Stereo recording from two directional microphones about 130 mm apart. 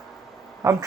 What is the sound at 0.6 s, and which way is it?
Speech, 25° right (ahead or behind).